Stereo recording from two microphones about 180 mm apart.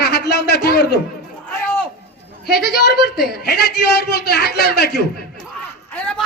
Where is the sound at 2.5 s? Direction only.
60° left (ahead or behind).